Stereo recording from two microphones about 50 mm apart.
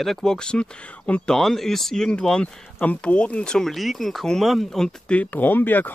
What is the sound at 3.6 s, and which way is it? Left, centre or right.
Speech, centre.